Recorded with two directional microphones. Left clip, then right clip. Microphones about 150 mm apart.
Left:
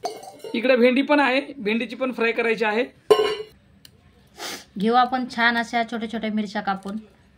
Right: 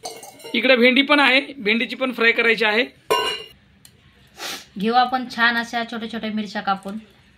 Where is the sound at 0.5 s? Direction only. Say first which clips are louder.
Right 3 dB; centre (ahead or behind).